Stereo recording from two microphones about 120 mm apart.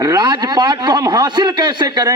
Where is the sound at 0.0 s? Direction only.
35° right (ahead or behind).